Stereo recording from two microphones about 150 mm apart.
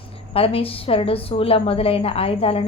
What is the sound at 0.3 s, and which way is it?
A woman's voice, 40° left (ahead or behind).